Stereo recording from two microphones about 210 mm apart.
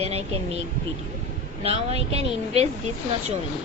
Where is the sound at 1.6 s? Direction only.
30° right (ahead or behind).